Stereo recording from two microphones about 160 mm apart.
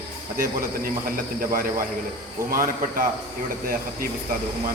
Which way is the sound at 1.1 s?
65° right (ahead or behind).